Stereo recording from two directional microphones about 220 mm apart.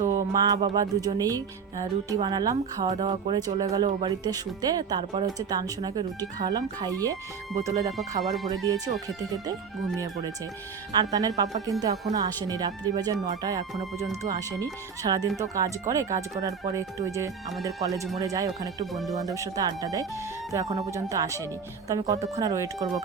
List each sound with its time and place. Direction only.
0.0 s music: 15° right (ahead or behind)
1.8 s speech: 15° right (ahead or behind)
2.9 s speech: 25° right (ahead or behind)
8.4 s speech: 15° right (ahead or behind)
10.9 s speech: 15° right (ahead or behind)